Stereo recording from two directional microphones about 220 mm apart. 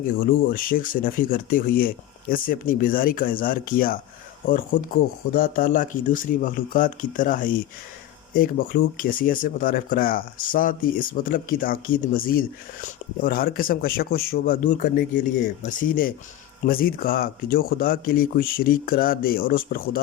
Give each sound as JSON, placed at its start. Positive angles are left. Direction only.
{"t": 0.2, "sound": "speech", "side_deg": 40}